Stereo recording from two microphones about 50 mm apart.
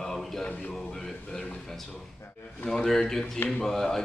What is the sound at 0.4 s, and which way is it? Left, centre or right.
Speech, left.